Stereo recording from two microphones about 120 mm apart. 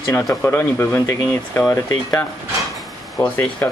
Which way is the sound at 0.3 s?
20° left (ahead or behind).